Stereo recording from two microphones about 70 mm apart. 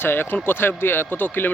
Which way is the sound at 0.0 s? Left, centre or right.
Left.